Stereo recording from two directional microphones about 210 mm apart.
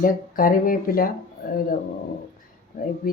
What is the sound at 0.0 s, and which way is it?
Speech, 40° left (ahead or behind).